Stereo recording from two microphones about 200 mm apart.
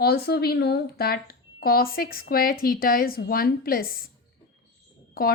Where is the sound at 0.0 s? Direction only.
55° left (ahead or behind).